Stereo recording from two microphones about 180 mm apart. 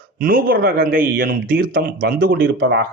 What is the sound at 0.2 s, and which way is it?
A man's voice, 55° right (ahead or behind).